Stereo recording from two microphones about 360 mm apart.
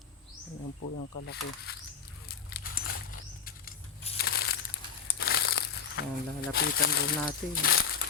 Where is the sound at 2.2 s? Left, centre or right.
Left.